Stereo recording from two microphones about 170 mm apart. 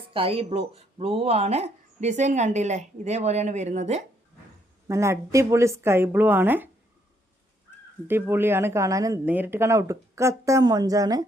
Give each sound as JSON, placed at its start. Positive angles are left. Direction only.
{"t": 0.1, "sound": "speech", "side_deg": -35}
{"t": 4.9, "sound": "speech", "side_deg": -15}
{"t": 8.0, "sound": "speech", "side_deg": -15}